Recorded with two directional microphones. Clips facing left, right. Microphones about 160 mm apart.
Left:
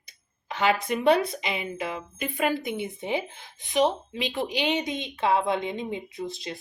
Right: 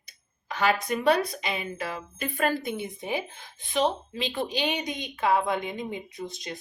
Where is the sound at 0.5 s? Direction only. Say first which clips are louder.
Left 1 dB; 25° left (ahead or behind).